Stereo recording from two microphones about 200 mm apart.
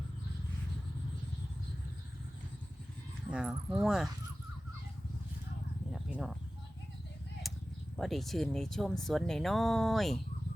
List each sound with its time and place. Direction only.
3.2 s speech: 5° right (ahead or behind)
5.9 s a sound: 5° right (ahead or behind)
7.9 s speech: centre (ahead or behind)